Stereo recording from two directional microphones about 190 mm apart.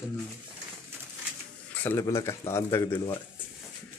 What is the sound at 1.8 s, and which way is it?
Speech, 15° left (ahead or behind).